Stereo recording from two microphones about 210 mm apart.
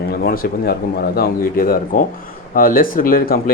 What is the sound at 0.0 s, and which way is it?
Speech, 45° left (ahead or behind).